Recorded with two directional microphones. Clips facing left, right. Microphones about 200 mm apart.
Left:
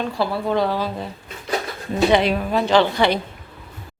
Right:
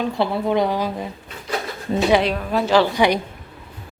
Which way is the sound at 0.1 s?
20° right (ahead or behind).